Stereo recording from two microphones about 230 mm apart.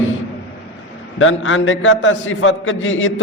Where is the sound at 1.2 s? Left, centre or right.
Left.